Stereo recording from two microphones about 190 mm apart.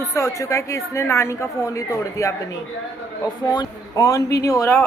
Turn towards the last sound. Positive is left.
turn(degrees=15)  # may be behind; listen again after turning